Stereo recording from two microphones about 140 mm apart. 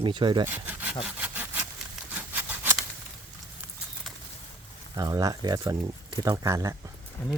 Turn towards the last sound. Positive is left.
turn(degrees=10)  # may be behind; listen again after turning